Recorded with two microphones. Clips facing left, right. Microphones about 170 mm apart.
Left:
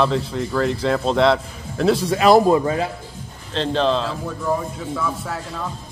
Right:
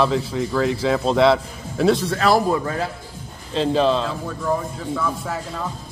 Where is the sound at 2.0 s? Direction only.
15° left (ahead or behind).